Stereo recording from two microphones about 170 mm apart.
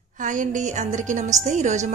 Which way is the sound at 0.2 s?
50° right (ahead or behind).